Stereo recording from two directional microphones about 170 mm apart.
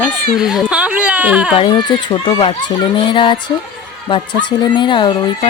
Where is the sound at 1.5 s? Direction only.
30° left (ahead or behind).